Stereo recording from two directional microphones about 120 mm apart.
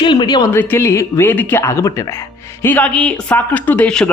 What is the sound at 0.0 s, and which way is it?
Speech, 40° left (ahead or behind).